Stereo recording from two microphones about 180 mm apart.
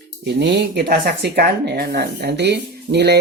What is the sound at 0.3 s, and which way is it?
Speech, 70° right (ahead or behind).